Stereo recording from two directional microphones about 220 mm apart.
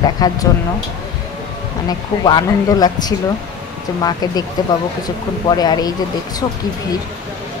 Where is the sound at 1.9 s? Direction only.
20° left (ahead or behind).